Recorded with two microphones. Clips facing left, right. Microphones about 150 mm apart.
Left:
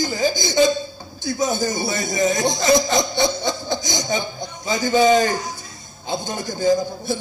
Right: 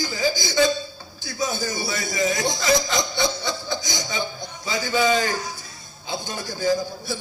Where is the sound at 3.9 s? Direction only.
50° left (ahead or behind).